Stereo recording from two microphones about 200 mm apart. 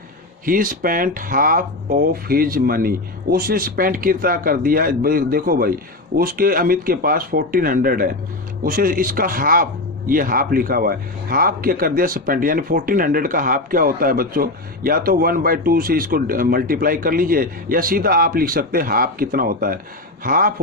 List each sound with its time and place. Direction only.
0.4 s speech: 45° right (ahead or behind)